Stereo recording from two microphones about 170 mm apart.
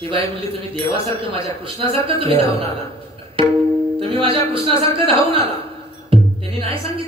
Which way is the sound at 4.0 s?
30° right (ahead or behind).